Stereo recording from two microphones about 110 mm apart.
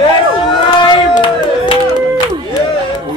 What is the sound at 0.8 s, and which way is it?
Crowd, 50° left (ahead or behind).